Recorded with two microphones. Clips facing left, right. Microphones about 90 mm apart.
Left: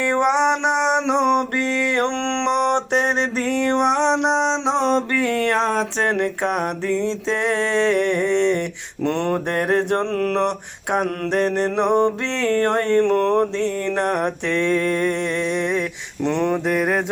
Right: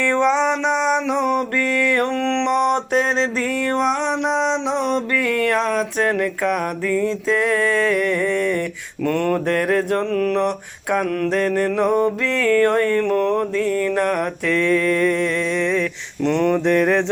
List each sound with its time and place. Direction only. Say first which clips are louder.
0.0 s mantra: even; 20° left (ahead or behind); by 10.4 s 40° left (ahead or behind)
11.3 s mantra: left 1 dB; 25° left (ahead or behind)
16.6 s music: right 4 dB; 10° left (ahead or behind)